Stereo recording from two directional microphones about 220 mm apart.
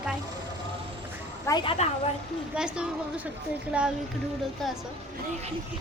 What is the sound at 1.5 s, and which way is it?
Speech, 20° left (ahead or behind).